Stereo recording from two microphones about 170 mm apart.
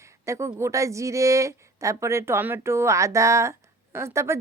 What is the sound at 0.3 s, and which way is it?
Speech, 15° right (ahead or behind).